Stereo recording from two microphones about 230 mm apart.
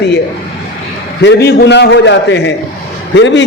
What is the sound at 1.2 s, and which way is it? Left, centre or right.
Speech, left.